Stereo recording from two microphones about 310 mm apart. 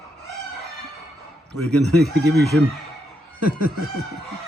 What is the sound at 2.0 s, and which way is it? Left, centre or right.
Speech, centre.